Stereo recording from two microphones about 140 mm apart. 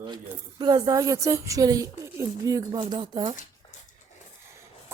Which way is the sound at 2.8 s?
35° right (ahead or behind).